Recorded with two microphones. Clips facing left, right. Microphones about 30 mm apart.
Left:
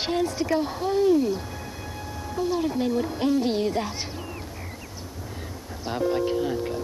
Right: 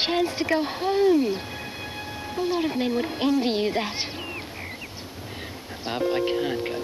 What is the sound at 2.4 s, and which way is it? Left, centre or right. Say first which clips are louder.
Speech: even; right.